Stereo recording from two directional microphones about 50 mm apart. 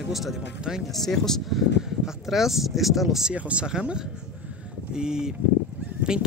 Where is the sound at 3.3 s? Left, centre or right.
Right.